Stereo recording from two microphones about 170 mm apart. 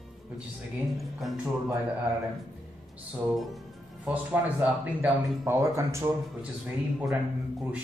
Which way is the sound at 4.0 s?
10° right (ahead or behind).